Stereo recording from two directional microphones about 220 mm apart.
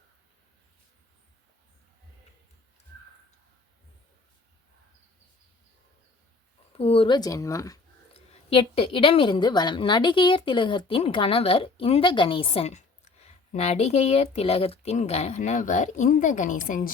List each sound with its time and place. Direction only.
6.7 s speech: 25° left (ahead or behind)
8.1 s a woman's voice: 25° left (ahead or behind)